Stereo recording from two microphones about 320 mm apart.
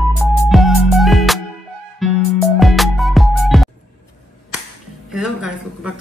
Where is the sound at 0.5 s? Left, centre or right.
Centre.